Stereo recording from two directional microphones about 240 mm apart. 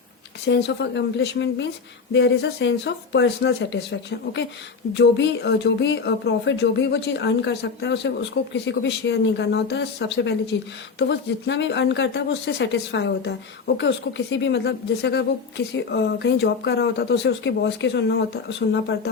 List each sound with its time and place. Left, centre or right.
0.4 s speech: left
4.9 s speech: left